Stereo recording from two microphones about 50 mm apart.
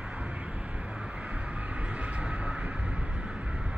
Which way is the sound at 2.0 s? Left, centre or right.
Right.